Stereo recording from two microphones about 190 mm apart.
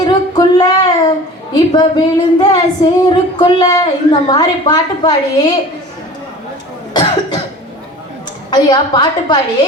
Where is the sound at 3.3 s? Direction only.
20° left (ahead or behind).